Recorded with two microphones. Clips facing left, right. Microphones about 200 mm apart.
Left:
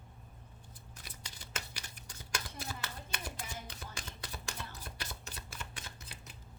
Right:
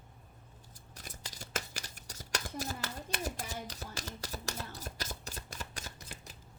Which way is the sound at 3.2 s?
40° right (ahead or behind).